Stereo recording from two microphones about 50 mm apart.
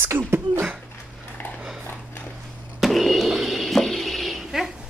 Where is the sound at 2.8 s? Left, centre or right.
Centre.